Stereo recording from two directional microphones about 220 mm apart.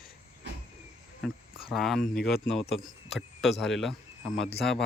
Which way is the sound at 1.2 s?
Centre (ahead or behind).